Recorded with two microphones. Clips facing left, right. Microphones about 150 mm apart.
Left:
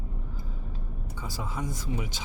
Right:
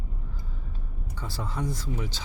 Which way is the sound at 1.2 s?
10° left (ahead or behind).